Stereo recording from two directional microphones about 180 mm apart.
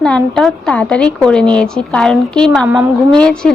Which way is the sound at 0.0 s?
5° left (ahead or behind).